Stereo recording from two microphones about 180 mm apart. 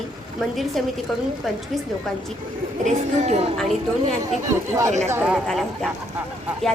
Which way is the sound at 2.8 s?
40° right (ahead or behind).